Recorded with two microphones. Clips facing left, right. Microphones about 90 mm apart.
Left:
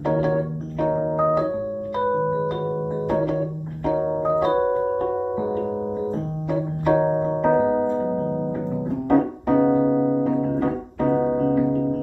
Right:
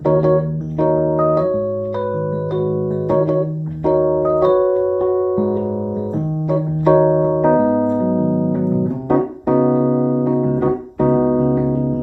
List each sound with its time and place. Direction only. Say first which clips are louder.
0.1 s organ: right 7 dB; 25° right (ahead or behind)
3.9 s keyboard: right 7 dB; 25° right (ahead or behind)
6.8 s music: right 7 dB; 25° right (ahead or behind)
7.4 s keyboard: right 2 dB; 25° right (ahead or behind)